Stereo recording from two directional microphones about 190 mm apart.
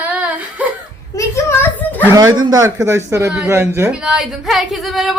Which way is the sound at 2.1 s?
20° right (ahead or behind).